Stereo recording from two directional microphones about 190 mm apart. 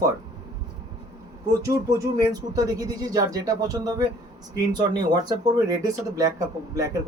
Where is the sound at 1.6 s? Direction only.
15° right (ahead or behind).